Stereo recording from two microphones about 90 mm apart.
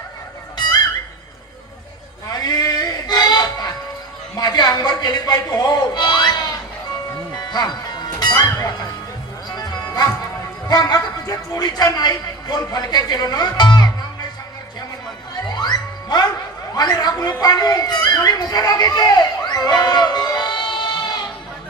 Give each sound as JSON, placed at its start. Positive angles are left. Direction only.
{"t": 0.5, "sound": "music", "side_deg": 55}
{"t": 2.4, "sound": "music", "side_deg": 45}
{"t": 11.5, "sound": "a man's voice", "side_deg": 45}
{"t": 15.4, "sound": "music", "side_deg": 50}
{"t": 16.7, "sound": "a man's voice", "side_deg": 50}
{"t": 17.4, "sound": "music", "side_deg": 45}